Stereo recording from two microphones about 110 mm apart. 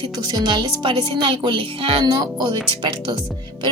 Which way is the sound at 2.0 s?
40° right (ahead or behind).